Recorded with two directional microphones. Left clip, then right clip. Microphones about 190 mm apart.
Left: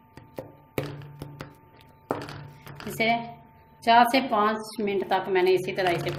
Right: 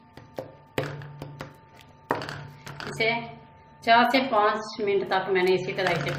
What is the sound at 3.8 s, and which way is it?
A woman's voice, 45° left (ahead or behind).